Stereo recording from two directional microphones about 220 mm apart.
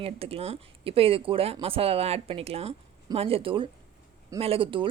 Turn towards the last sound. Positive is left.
turn(degrees=-25)  # may be behind; listen again after turning